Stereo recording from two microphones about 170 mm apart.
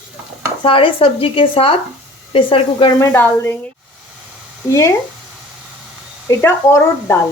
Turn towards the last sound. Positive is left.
turn(degrees=15)  # may be behind; listen again after turning